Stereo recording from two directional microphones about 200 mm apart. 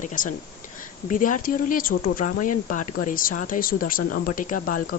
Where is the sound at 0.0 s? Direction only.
40° left (ahead or behind).